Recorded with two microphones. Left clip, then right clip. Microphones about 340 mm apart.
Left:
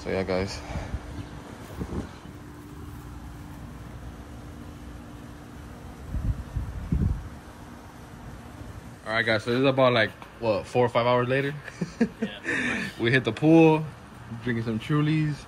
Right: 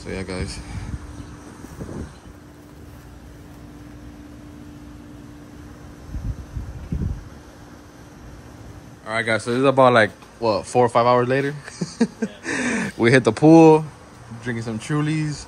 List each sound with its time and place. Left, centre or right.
0.0 s speech: centre
9.0 s speech: centre
12.6 s a sound: right
13.2 s speech: centre